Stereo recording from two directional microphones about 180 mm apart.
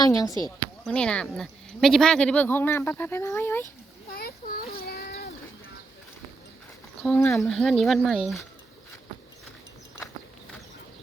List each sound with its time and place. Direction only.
0.0 s speech: 20° left (ahead or behind)
0.9 s speech: 5° left (ahead or behind)
4.1 s a sound: 55° left (ahead or behind)
7.3 s speech: centre (ahead or behind)